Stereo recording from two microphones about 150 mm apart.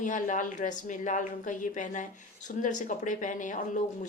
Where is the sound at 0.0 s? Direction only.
55° left (ahead or behind).